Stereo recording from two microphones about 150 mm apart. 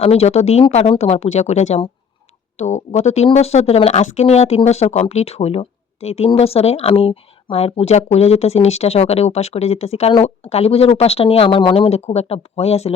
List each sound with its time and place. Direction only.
0.0 s speech: 45° left (ahead or behind)